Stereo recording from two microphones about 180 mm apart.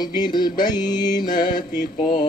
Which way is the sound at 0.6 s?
25° left (ahead or behind).